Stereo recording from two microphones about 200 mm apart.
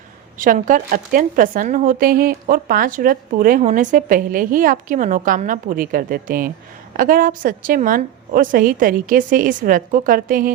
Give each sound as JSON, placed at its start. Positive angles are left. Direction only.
{"t": 0.3, "sound": "speech", "side_deg": -40}